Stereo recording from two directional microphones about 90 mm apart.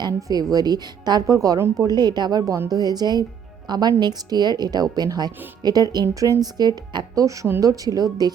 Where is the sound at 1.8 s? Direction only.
50° right (ahead or behind).